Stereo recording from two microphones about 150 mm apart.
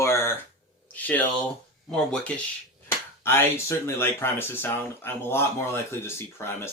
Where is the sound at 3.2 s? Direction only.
15° left (ahead or behind).